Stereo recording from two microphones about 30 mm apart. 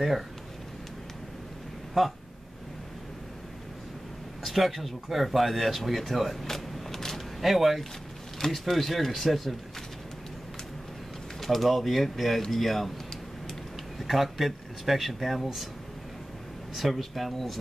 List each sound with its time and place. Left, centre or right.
2.0 s speech: centre
4.4 s speech: centre
6.4 s a sound: centre
7.4 s speech: centre
11.4 s speech: centre
13.9 s speech: centre
16.7 s speech: centre